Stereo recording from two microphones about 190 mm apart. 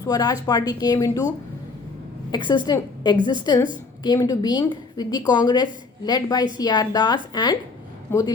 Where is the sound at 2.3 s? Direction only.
25° left (ahead or behind).